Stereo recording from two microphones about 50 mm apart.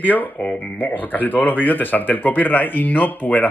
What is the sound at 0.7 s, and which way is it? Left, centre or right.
Speech, left.